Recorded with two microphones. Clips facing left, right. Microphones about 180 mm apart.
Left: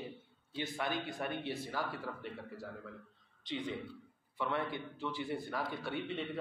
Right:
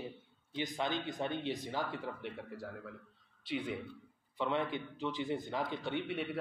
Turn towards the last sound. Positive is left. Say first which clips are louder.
# right 2 dB
turn(degrees=-15)  # may be behind; listen again after turning